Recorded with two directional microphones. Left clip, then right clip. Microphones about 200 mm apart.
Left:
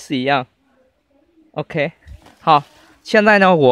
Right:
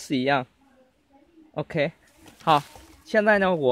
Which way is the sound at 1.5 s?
15° left (ahead or behind).